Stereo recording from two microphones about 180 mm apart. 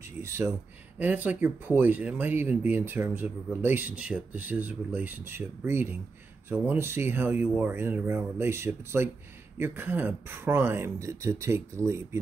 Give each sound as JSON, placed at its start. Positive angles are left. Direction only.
{"t": 0.2, "sound": "speech", "side_deg": -15}